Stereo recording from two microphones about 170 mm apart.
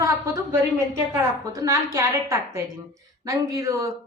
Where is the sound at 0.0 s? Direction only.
20° right (ahead or behind).